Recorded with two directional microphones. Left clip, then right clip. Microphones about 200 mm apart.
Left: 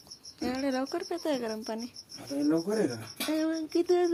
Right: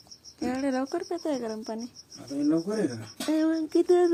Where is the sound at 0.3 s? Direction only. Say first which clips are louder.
Right 2 dB; 15° right (ahead or behind).